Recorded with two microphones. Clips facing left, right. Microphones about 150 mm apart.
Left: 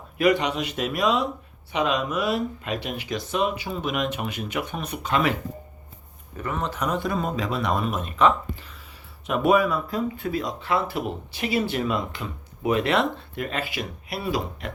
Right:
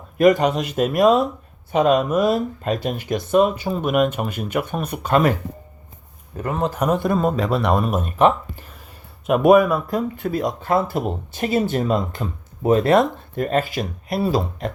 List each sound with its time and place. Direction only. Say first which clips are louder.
0.2 s speech: right 6 dB; 45° right (ahead or behind)
6.5 s a man's voice: right 6 dB; 35° right (ahead or behind)
6.7 s speech: right 7 dB; 50° right (ahead or behind)